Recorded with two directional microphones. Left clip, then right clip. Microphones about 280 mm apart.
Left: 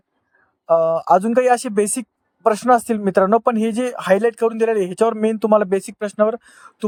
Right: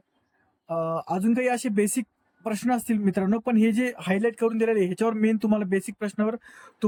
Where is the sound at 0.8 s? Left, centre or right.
Centre.